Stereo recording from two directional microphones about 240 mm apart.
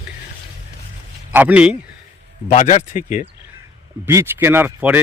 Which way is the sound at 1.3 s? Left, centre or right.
Centre.